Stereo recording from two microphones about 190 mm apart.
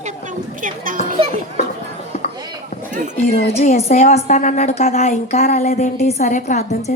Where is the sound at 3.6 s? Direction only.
35° left (ahead or behind).